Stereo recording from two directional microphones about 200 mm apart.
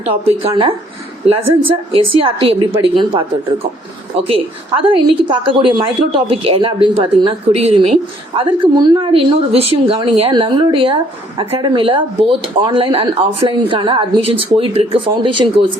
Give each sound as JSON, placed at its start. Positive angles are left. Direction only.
{"t": 0.0, "sound": "speech", "side_deg": -30}
{"t": 4.8, "sound": "speech", "side_deg": -25}